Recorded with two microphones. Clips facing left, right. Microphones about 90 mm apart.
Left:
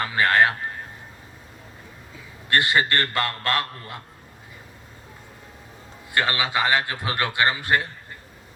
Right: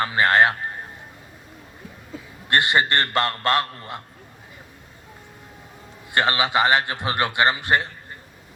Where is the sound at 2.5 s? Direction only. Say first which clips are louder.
Right 1 dB; 25° right (ahead or behind).